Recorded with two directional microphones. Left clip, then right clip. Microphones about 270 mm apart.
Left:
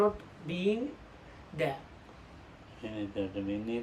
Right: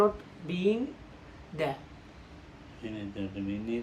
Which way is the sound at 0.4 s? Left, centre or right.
Centre.